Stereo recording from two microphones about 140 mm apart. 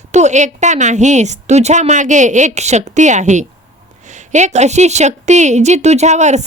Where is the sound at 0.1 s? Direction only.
55° right (ahead or behind).